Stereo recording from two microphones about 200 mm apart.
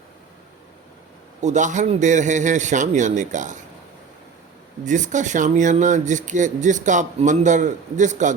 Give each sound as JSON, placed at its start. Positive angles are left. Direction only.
{"t": 1.4, "sound": "speech", "side_deg": -35}
{"t": 4.9, "sound": "speech", "side_deg": -40}